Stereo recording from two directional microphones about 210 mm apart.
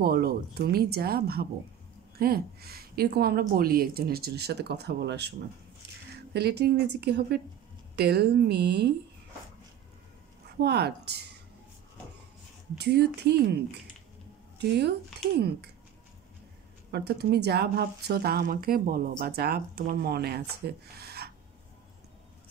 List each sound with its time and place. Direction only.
0.0 s a woman's voice: 50° right (ahead or behind)
6.3 s a woman's voice: 50° right (ahead or behind)
10.6 s a woman's voice: 50° right (ahead or behind)
12.7 s a woman's voice: 50° right (ahead or behind)
15.3 s a woman's voice: 50° right (ahead or behind)
16.9 s a woman's voice: 50° right (ahead or behind)